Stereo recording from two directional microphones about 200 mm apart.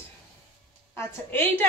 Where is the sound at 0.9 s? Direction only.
10° left (ahead or behind).